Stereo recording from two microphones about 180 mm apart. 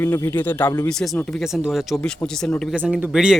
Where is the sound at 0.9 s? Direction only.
5° left (ahead or behind).